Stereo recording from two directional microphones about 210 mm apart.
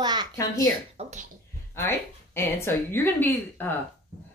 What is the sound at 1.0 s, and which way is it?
Speech, 35° right (ahead or behind).